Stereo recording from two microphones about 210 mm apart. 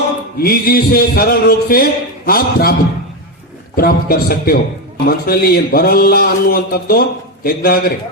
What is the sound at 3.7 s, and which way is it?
A man's voice, 45° left (ahead or behind).